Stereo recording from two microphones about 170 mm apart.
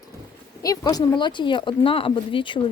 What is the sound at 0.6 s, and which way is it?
Speech, 20° left (ahead or behind).